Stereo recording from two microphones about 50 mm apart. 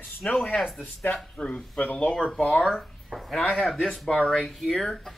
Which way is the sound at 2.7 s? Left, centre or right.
Centre.